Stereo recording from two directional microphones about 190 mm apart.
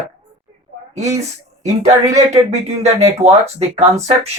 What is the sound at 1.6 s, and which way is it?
Speech, 35° right (ahead or behind).